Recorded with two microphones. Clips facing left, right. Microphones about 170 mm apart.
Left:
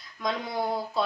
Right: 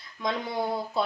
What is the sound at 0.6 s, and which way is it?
Speech, centre (ahead or behind).